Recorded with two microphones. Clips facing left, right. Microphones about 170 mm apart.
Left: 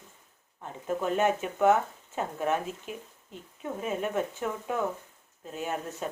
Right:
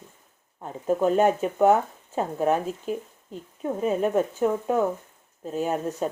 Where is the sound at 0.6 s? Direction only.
35° right (ahead or behind).